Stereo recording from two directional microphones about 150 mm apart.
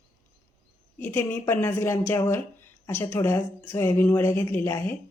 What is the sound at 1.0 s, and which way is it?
A woman's voice, 15° left (ahead or behind).